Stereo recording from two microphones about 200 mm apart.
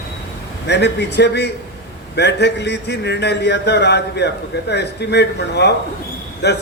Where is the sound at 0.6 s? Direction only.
60° left (ahead or behind).